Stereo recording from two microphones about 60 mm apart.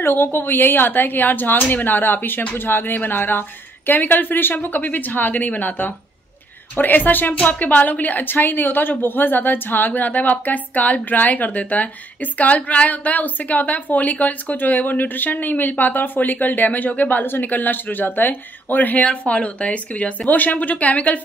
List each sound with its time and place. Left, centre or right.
0.0 s a woman's voice: left